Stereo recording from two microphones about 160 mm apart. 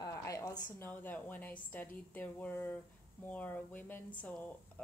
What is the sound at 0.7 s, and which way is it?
Speech, 10° left (ahead or behind).